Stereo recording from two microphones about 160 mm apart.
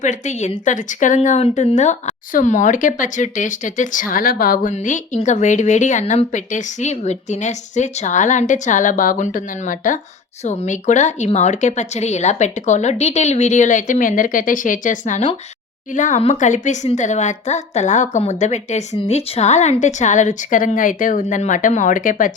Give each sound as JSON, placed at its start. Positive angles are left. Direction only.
{"t": 0.0, "sound": "speech", "side_deg": 50}
{"t": 4.7, "sound": "speech", "side_deg": 50}
{"t": 10.4, "sound": "speech", "side_deg": 45}